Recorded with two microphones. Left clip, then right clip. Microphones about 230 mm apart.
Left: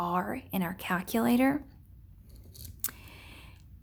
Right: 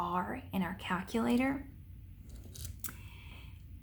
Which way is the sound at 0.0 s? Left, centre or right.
Left.